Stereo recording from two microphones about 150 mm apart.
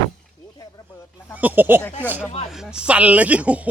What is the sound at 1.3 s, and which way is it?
Speech, 10° right (ahead or behind).